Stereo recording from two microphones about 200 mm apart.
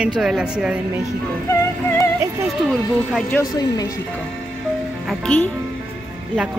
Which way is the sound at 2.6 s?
Centre (ahead or behind).